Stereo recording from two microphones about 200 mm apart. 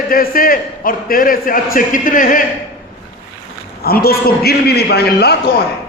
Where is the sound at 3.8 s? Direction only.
50° left (ahead or behind).